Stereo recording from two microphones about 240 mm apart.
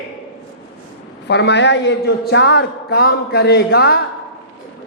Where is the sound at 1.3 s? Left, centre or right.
Left.